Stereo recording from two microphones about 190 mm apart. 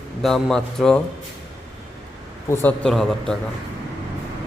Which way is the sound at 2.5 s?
10° left (ahead or behind).